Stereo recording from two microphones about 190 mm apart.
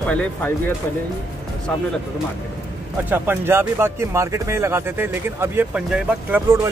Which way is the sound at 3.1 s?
10° right (ahead or behind).